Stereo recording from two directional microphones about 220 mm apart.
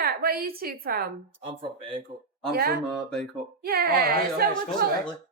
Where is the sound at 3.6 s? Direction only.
45° right (ahead or behind).